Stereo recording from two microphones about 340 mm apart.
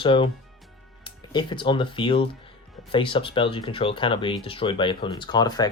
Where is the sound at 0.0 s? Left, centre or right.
Centre.